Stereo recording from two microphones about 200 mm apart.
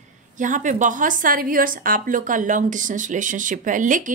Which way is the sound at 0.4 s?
40° right (ahead or behind).